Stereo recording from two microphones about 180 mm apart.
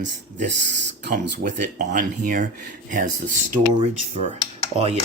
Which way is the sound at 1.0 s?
60° right (ahead or behind).